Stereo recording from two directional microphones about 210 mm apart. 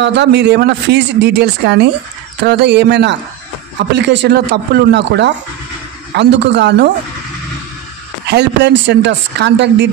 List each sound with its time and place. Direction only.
0.0 s speech: 55° right (ahead or behind)
8.3 s speech: 55° right (ahead or behind)